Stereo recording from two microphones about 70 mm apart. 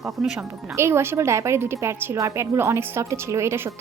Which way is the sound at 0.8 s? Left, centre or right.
Right.